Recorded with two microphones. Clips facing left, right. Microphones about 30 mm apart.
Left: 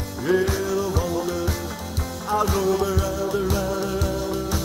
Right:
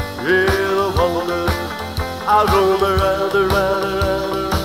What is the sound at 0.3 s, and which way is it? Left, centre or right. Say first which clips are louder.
Music: right 6 dB; right.